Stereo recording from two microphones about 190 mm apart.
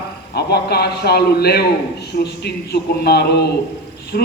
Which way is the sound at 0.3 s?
60° left (ahead or behind).